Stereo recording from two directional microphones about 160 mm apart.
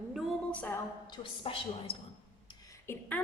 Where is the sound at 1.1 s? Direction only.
35° left (ahead or behind).